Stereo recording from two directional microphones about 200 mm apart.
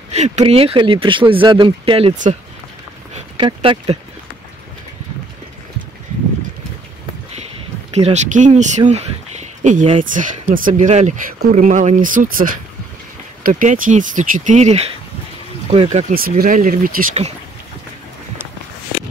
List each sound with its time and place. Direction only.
0.1 s speech: 35° right (ahead or behind)
7.9 s speech: 35° right (ahead or behind)
16.1 s speech: 45° right (ahead or behind)